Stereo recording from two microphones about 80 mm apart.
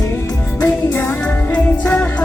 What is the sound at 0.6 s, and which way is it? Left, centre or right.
Music, left.